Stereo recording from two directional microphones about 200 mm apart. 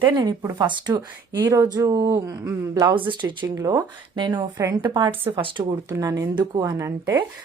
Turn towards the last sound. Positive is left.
turn(degrees=-15)  # may be behind; listen again after turning